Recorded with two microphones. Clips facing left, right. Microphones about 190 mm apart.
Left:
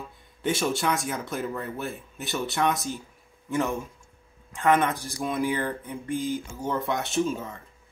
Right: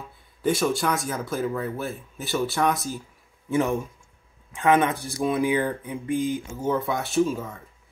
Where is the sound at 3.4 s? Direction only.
15° right (ahead or behind).